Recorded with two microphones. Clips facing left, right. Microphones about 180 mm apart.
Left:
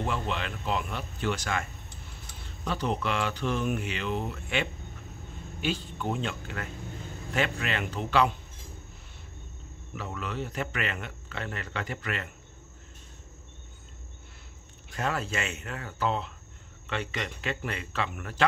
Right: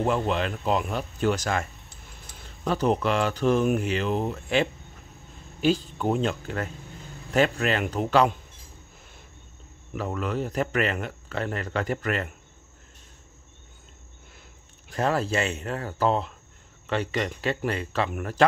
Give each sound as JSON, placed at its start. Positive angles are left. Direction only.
{"t": 0.0, "sound": "speech", "side_deg": -40}
{"t": 2.6, "sound": "speech", "side_deg": -45}
{"t": 9.9, "sound": "speech", "side_deg": -45}
{"t": 15.0, "sound": "speech", "side_deg": -35}